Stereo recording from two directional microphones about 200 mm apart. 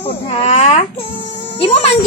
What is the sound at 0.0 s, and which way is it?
Speech, 30° left (ahead or behind).